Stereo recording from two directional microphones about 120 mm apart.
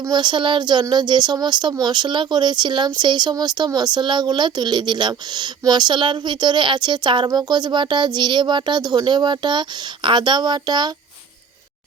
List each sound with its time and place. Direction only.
0.0 s speech: 40° right (ahead or behind)